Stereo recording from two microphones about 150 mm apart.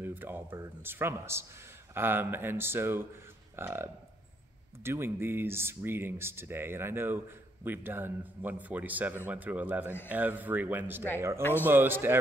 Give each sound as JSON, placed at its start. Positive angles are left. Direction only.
{"t": 0.0, "sound": "speech", "side_deg": -15}